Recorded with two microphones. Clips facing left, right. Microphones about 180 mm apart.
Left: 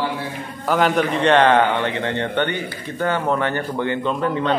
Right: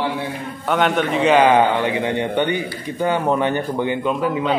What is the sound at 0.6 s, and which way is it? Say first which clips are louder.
A man's voice: even; centre (ahead or behind).